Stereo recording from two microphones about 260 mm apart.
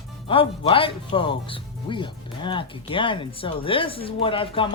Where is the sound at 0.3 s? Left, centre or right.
Left.